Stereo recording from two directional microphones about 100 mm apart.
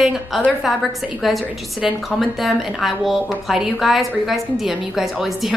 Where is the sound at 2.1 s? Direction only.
Centre (ahead or behind).